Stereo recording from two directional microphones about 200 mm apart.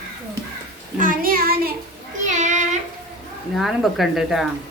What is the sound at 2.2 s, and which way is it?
Child singing, 40° right (ahead or behind).